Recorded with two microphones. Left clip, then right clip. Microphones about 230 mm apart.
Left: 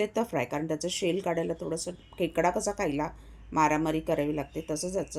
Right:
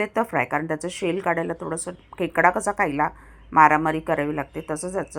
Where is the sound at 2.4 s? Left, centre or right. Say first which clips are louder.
Right 9 dB; right.